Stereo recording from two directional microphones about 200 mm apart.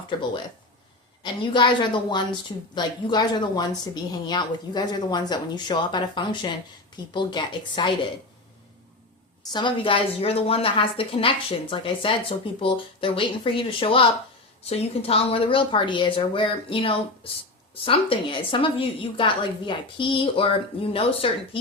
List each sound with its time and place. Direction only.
1.2 s a woman's voice: 20° left (ahead or behind)
9.5 s a woman's voice: 20° left (ahead or behind)